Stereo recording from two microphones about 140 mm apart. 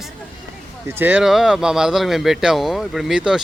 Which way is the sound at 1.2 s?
5° right (ahead or behind).